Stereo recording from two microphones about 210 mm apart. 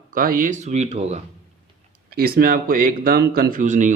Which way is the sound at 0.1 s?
40° right (ahead or behind).